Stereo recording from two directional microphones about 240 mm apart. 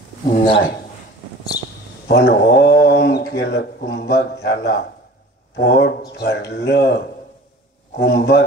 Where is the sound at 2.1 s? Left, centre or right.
Left.